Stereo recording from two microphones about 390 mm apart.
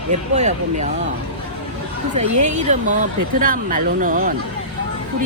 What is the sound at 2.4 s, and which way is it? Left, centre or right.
Speech, centre.